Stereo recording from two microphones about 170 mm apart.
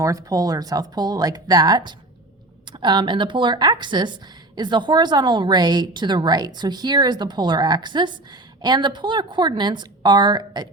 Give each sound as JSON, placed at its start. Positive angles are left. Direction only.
{"t": 0.0, "sound": "a woman's voice", "side_deg": -20}